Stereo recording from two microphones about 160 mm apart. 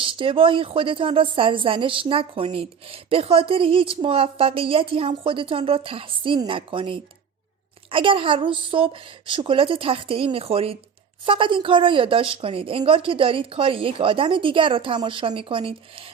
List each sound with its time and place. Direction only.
0.0 s a woman's voice: 35° right (ahead or behind)